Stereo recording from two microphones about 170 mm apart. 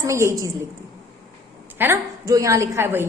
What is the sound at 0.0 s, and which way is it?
Speech, 15° right (ahead or behind).